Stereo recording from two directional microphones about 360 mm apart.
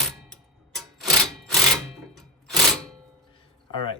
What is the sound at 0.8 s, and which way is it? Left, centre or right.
Wood, centre.